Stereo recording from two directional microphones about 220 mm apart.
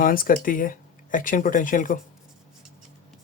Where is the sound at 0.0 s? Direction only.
40° left (ahead or behind).